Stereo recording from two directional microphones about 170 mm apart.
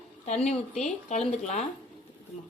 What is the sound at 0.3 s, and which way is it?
Speech, 40° left (ahead or behind).